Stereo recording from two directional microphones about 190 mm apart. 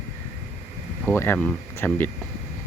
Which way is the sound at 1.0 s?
10° left (ahead or behind).